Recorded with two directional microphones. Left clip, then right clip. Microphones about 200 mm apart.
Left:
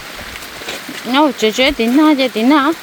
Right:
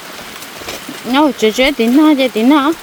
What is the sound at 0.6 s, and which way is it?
Speech, 15° right (ahead or behind).